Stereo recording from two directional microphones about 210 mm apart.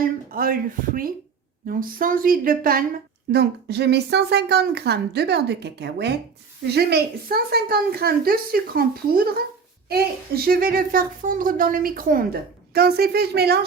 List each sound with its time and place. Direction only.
0.0 s speech: 45° right (ahead or behind)